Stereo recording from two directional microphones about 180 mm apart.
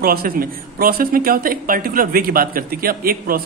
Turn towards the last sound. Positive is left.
turn(degrees=-55)  # may be behind; listen again after turning